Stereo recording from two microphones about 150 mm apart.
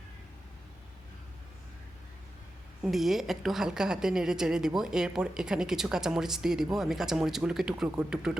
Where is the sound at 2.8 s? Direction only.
Centre (ahead or behind).